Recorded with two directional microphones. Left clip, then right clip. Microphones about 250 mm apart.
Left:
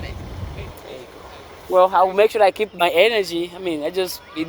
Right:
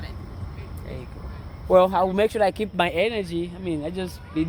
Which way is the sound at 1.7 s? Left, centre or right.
Centre.